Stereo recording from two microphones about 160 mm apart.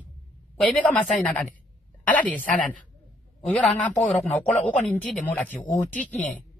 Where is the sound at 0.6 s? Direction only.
10° left (ahead or behind).